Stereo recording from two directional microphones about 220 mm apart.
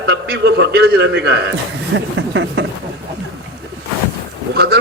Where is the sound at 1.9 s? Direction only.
55° right (ahead or behind).